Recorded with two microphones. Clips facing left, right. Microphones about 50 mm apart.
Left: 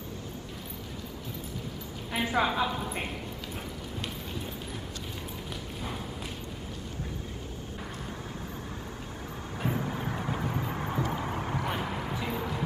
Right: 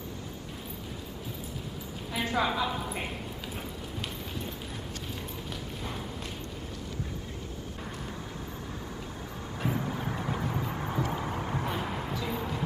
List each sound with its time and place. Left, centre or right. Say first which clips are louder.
2.1 s a woman's voice: left 2 dB; centre
9.6 s vehicle: even; centre
11.1 s a sound: even; centre
12.3 s music: left 1 dB; centre